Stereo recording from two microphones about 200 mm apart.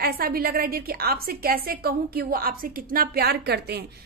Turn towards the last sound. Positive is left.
turn(degrees=-55)  # may be behind; listen again after turning